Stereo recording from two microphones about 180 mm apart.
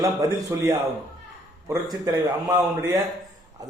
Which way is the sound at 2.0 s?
15° right (ahead or behind).